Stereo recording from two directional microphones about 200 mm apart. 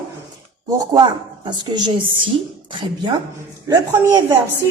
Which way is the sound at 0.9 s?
20° right (ahead or behind).